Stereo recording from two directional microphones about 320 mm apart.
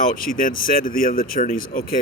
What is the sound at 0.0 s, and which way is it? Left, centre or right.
A man's voice, left.